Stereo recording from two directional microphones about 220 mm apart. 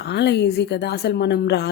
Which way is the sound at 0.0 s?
50° left (ahead or behind).